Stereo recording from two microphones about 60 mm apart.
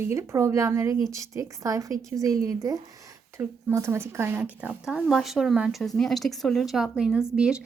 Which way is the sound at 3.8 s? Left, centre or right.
Right.